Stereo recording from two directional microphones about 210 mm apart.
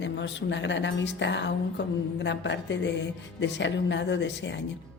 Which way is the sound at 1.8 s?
55° left (ahead or behind).